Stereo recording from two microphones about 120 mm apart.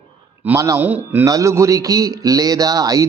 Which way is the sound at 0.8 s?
15° right (ahead or behind).